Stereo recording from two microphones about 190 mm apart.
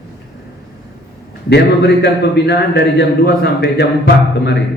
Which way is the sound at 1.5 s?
60° left (ahead or behind).